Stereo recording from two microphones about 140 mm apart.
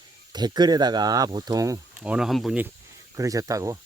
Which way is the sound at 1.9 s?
5° right (ahead or behind).